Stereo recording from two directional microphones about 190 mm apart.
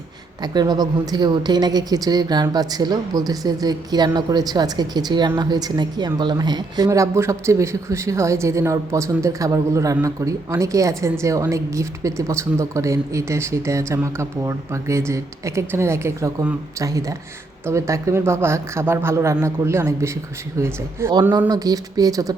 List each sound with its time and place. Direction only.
0.4 s a woman's voice: 20° right (ahead or behind)